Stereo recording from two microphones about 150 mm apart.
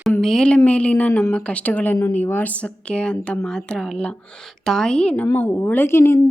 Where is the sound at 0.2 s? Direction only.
5° left (ahead or behind).